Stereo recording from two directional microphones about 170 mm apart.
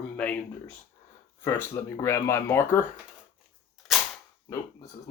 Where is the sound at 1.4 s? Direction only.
15° left (ahead or behind).